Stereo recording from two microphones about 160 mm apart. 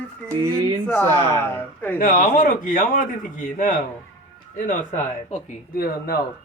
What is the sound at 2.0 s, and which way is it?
A man's voice, 60° left (ahead or behind).